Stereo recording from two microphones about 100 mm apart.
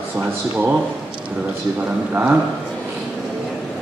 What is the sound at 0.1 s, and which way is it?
A man's voice, 20° right (ahead or behind).